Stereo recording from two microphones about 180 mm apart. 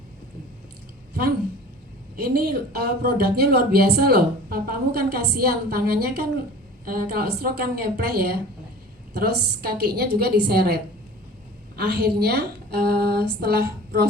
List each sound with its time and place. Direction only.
2.1 s speech: 60° right (ahead or behind)
11.8 s speech: 65° right (ahead or behind)